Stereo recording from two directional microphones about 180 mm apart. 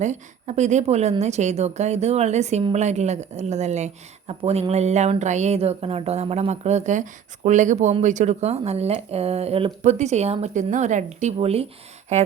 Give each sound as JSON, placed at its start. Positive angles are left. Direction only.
{"t": 0.0, "sound": "speech", "side_deg": -40}